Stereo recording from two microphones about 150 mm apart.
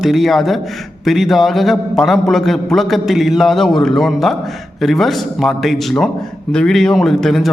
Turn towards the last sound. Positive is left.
turn(degrees=0)  # may be behind; listen again after turning